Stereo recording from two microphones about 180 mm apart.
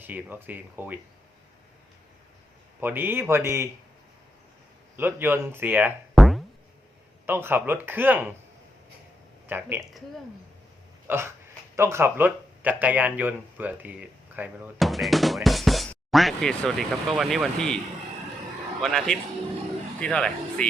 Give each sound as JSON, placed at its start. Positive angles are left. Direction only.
{"t": 0.0, "sound": "speech", "side_deg": -10}
{"t": 2.8, "sound": "speech", "side_deg": -10}
{"t": 4.9, "sound": "speech", "side_deg": -10}
{"t": 6.1, "sound": "music", "side_deg": 0}
{"t": 7.3, "sound": "speech", "side_deg": -10}
{"t": 9.5, "sound": "speech", "side_deg": -10}
{"t": 11.1, "sound": "speech", "side_deg": -10}
{"t": 18.8, "sound": "speech", "side_deg": 0}